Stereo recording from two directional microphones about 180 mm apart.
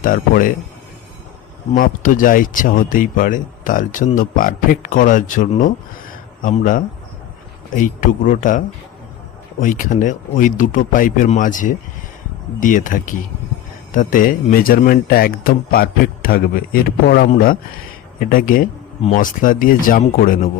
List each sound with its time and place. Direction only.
0.0 s speech: 50° left (ahead or behind)
1.7 s speech: 50° left (ahead or behind)